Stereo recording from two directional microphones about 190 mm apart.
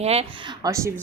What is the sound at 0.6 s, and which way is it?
Speech, 15° right (ahead or behind).